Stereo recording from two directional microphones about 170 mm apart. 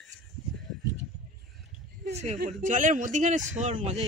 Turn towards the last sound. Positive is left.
turn(degrees=-45)  # may be behind; listen again after turning